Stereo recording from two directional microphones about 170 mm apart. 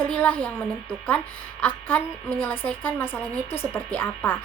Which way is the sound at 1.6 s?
10° left (ahead or behind).